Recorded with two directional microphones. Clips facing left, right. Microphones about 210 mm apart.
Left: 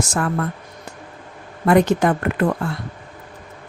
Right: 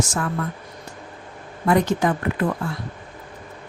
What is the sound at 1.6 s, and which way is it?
Speech, 65° left (ahead or behind).